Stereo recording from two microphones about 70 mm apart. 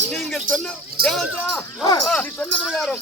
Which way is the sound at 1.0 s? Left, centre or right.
Centre.